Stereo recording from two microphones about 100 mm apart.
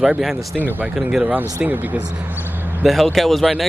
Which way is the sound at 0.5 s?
15° right (ahead or behind).